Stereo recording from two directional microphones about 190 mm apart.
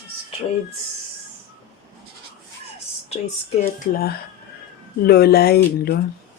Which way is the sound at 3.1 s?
35° left (ahead or behind).